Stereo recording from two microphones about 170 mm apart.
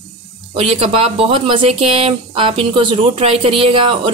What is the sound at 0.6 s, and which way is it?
Speech, 35° right (ahead or behind).